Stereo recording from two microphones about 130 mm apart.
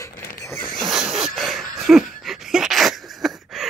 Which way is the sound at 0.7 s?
Centre (ahead or behind).